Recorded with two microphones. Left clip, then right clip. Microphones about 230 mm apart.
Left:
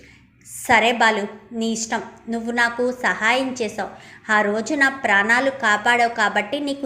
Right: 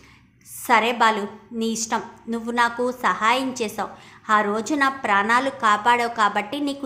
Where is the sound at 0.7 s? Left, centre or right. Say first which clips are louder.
Left 2 dB; centre.